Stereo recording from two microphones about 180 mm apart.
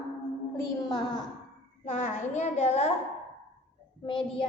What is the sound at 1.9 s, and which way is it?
A woman's voice, 40° left (ahead or behind).